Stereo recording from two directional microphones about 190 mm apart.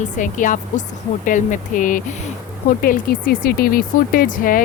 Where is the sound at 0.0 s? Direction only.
40° left (ahead or behind).